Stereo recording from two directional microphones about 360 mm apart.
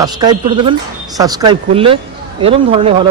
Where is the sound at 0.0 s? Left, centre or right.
Centre.